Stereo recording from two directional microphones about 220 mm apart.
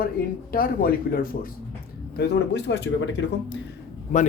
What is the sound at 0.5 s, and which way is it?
Speech, 40° left (ahead or behind).